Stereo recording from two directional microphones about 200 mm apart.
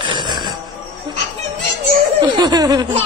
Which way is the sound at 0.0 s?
20° right (ahead or behind).